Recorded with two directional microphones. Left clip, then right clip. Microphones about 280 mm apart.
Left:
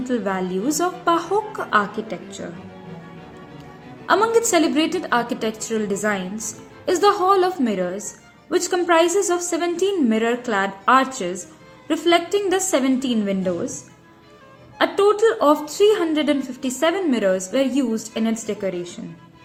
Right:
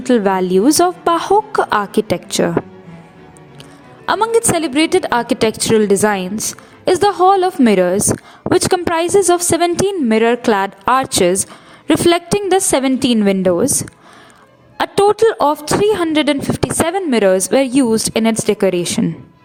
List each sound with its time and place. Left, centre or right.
0.0 s a woman's voice: right
4.0 s a woman's voice: right
14.8 s a woman's voice: right